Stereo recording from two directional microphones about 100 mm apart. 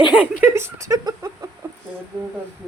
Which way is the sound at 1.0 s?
35° right (ahead or behind).